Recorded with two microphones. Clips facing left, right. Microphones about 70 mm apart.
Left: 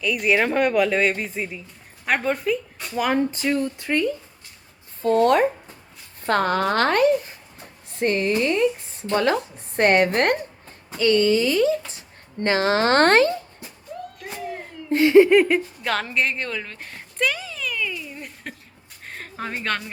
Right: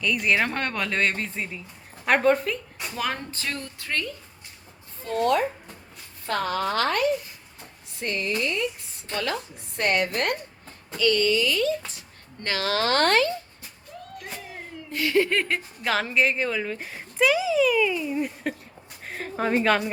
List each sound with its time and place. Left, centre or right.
0.0 s speech: centre
2.9 s speech: centre
5.0 s a woman's voice: left
14.8 s a sound: left; by 15.6 s centre
15.8 s speech: centre
19.0 s a sound: centre